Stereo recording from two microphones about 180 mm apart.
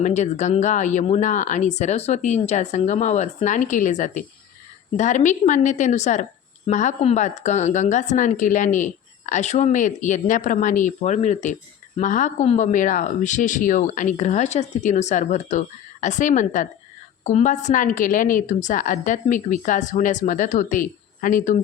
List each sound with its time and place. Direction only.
0.0 s a woman's voice: 40° left (ahead or behind)